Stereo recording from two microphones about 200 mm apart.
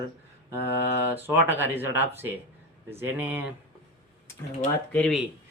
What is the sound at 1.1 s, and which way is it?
Speech, 10° right (ahead or behind).